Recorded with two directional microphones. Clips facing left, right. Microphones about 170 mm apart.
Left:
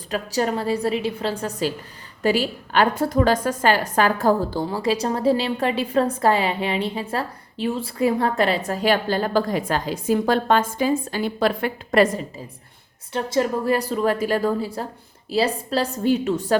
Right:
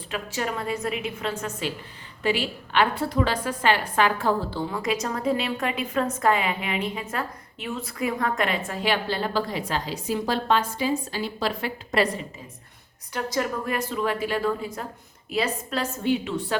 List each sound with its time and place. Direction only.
0.1 s a woman's voice: 35° left (ahead or behind)
13.1 s a woman's voice: 25° left (ahead or behind); by 16.6 s 45° left (ahead or behind)